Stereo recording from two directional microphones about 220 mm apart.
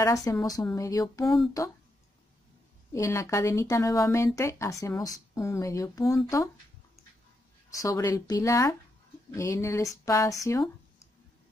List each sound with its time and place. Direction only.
0.0 s speech: 15° left (ahead or behind)
1.2 s speech: centre (ahead or behind)
2.9 s speech: 15° left (ahead or behind)
7.7 s speech: 15° left (ahead or behind)
10.4 s a sound: 15° left (ahead or behind)